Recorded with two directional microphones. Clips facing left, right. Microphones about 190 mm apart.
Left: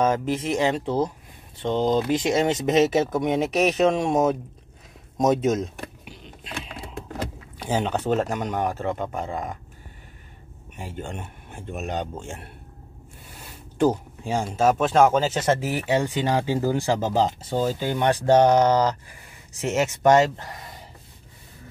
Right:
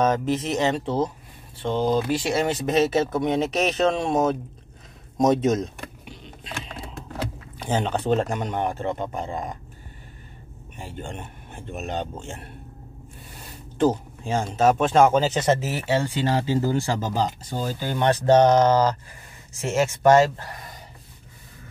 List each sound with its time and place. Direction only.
0.0 s speech: 10° left (ahead or behind)
5.1 s a sound: 5° left (ahead or behind)
7.6 s speech: 5° left (ahead or behind)
10.8 s speech: 5° left (ahead or behind)
13.7 s speech: 10° left (ahead or behind)
15.6 s speech: 15° left (ahead or behind)